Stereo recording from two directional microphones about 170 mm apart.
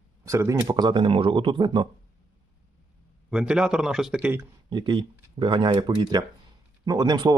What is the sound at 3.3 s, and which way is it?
A man's voice, 5° right (ahead or behind).